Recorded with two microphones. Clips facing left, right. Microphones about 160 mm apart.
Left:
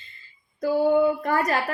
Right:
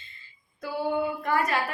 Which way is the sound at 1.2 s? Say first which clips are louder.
Left 3 dB; 45° left (ahead or behind).